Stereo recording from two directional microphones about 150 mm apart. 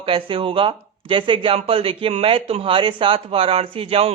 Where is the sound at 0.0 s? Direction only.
35° right (ahead or behind).